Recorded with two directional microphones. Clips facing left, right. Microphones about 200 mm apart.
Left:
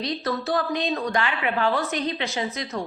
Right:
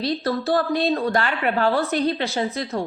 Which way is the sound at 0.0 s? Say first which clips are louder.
Right 4 dB; 30° right (ahead or behind).